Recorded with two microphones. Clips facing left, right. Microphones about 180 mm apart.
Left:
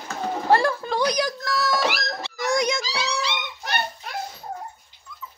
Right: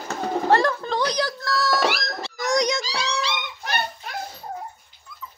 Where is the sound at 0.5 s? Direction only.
10° left (ahead or behind).